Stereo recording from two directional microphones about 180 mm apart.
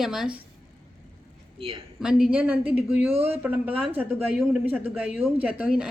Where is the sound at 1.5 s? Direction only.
30° right (ahead or behind).